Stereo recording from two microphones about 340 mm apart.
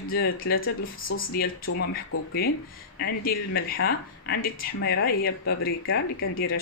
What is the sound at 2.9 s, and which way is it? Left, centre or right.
Speech, left.